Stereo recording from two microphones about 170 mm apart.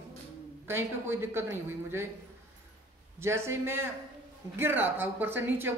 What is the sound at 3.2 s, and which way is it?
A man's voice, 15° right (ahead or behind).